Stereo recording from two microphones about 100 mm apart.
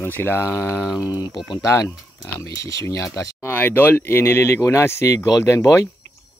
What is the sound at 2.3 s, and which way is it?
Speech, 30° left (ahead or behind).